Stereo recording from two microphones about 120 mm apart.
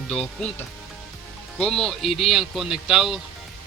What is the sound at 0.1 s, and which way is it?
Speech, 5° left (ahead or behind).